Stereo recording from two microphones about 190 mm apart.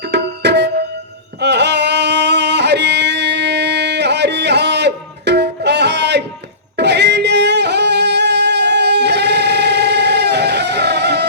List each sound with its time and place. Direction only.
0.1 s music: 65° right (ahead or behind)
6.7 s singing: 65° right (ahead or behind)